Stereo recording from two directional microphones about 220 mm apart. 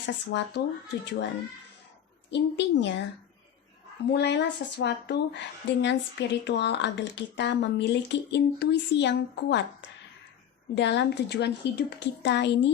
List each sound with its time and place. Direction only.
0.0 s a woman's voice: 55° left (ahead or behind)
2.3 s a woman's voice: 50° left (ahead or behind)
4.1 s a woman's voice: 50° left (ahead or behind)
10.8 s a woman's voice: 50° left (ahead or behind)